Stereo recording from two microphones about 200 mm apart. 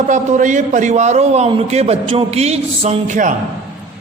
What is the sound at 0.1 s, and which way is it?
A man's voice, 40° right (ahead or behind).